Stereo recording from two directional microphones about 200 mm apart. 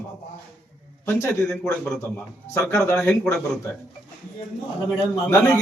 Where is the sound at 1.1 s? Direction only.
10° left (ahead or behind).